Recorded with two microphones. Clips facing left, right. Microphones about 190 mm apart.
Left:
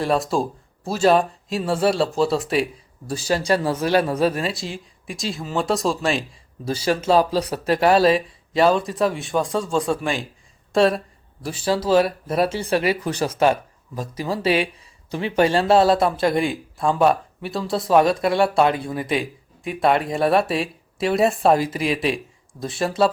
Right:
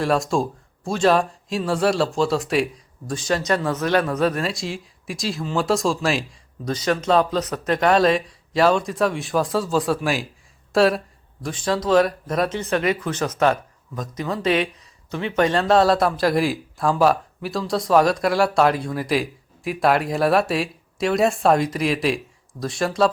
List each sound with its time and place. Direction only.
0.0 s speech: centre (ahead or behind)
3.4 s speech: 30° left (ahead or behind)
4.4 s speech: centre (ahead or behind)
13.1 s speech: 30° left (ahead or behind)
14.4 s speech: 5° left (ahead or behind)